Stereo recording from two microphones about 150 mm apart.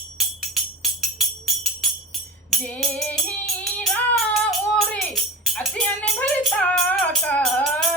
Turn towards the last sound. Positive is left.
turn(degrees=5)  # may be behind; listen again after turning